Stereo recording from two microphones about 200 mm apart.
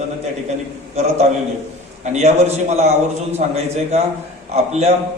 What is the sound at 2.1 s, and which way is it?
A man's voice, 35° right (ahead or behind).